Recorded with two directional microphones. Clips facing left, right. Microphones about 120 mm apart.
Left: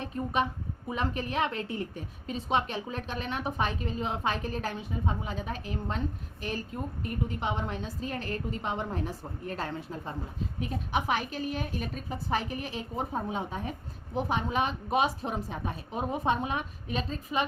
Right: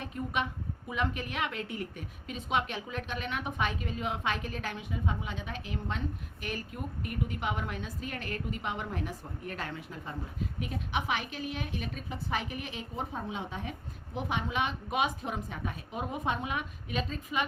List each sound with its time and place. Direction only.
0.0 s a woman's voice: 35° left (ahead or behind)